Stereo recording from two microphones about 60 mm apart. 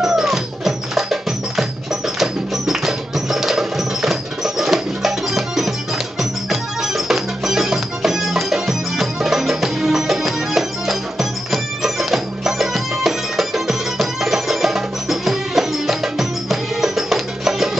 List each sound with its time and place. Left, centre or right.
0.0 s music: centre
2.1 s music: centre